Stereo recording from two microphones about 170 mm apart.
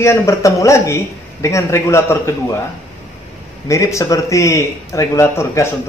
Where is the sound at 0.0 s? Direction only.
15° left (ahead or behind).